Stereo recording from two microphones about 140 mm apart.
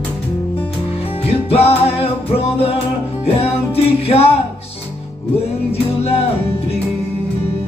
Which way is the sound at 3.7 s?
45° left (ahead or behind).